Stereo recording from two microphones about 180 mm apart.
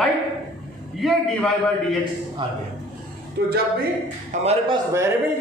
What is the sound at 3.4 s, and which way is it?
Speech, 65° right (ahead or behind).